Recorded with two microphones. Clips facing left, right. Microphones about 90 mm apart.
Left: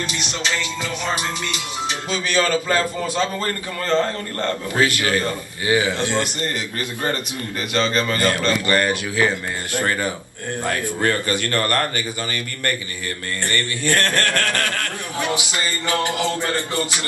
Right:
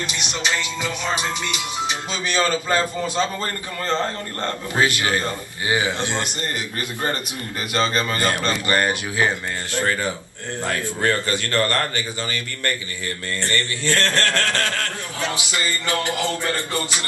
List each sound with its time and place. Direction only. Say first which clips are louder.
0.0 s music: even; 20° right (ahead or behind)
7.7 s music: left 1 dB; 20° right (ahead or behind)
9.8 s a man's voice: even; 50° left (ahead or behind)
15.2 s music: even; 20° left (ahead or behind)